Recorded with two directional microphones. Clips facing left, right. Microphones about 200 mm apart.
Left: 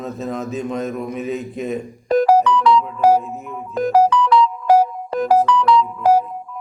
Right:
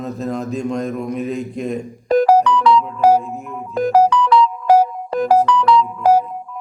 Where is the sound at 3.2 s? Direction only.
Centre (ahead or behind).